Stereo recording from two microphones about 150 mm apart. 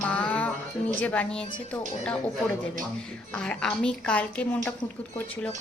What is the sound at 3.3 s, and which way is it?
Speech, 5° left (ahead or behind).